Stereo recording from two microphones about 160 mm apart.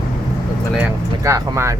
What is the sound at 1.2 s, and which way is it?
Speech, 20° right (ahead or behind).